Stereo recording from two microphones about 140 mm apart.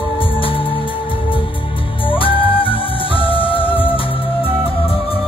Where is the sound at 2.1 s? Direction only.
40° left (ahead or behind).